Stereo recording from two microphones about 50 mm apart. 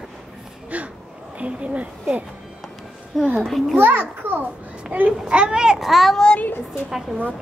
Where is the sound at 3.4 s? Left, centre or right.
Centre.